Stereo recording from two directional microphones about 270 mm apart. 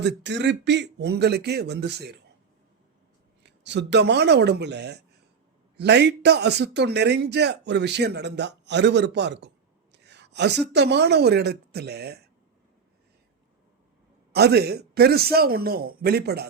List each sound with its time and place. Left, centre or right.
0.0 s a man's voice: right
3.4 s a man's voice: right
9.9 s a sound: right
10.7 s a man's voice: right
14.3 s a man's voice: right